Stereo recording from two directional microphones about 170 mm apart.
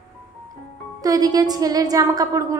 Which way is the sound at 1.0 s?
20° right (ahead or behind).